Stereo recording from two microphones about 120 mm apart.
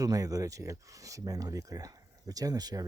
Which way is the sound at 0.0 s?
30° right (ahead or behind).